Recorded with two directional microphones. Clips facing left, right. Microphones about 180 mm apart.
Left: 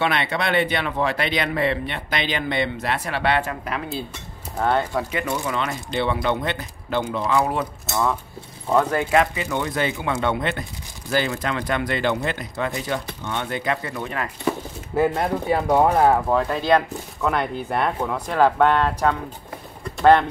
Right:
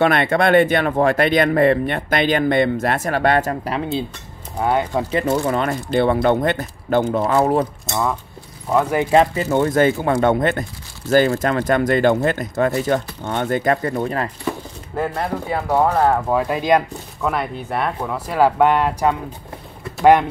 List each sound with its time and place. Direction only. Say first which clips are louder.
0.0 s speech: right 7 dB; 50° right (ahead or behind)
4.6 s speech: right 2 dB; 10° right (ahead or behind)
5.1 s speech: right 7 dB; 40° right (ahead or behind)
5.4 s speech: right 6 dB; 50° right (ahead or behind)
7.8 s speech: right 1 dB; 5° right (ahead or behind)
8.7 s speech: right 2 dB; 15° right (ahead or behind)
9.1 s speech: right 7 dB; 35° right (ahead or behind)
15.0 s speech: left 2 dB; 15° left (ahead or behind)
16.3 s speech: right 2 dB; 10° right (ahead or behind)
19.8 s a sound: right 2 dB; 10° right (ahead or behind)